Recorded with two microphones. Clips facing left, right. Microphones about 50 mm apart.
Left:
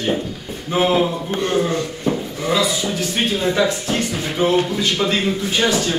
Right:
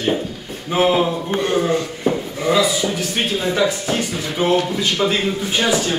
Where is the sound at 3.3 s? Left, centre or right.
Centre.